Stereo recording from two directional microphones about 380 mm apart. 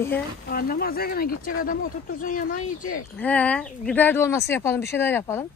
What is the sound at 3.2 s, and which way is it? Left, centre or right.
Speech, centre.